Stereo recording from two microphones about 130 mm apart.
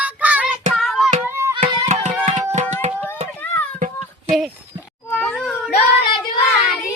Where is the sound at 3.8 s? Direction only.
80° right.